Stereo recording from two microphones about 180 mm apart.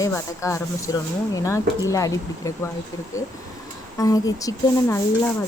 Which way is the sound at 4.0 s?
20° left (ahead or behind).